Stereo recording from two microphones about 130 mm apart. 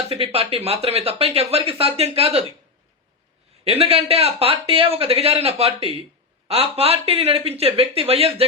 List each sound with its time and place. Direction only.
0.1 s speech: 50° right (ahead or behind)
3.6 s speech: 50° right (ahead or behind)